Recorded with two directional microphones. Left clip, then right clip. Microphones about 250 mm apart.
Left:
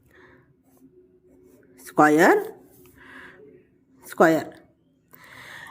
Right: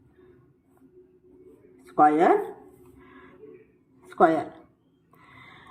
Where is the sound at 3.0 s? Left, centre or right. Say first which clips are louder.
Left 6 dB; left.